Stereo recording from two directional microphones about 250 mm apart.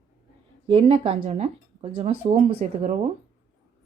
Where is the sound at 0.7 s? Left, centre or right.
Right.